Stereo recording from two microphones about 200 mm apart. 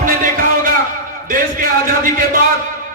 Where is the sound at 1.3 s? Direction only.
45° right (ahead or behind).